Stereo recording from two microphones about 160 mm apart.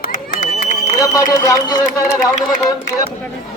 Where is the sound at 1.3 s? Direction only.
20° left (ahead or behind).